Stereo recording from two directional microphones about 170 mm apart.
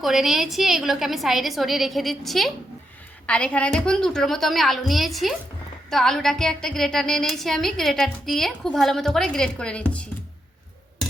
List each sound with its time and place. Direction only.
0.0 s a woman's voice: centre (ahead or behind)